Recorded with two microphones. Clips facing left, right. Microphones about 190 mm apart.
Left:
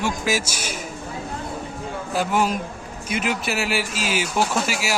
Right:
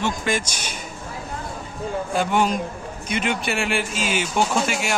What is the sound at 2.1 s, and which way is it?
Speech, 5° left (ahead or behind).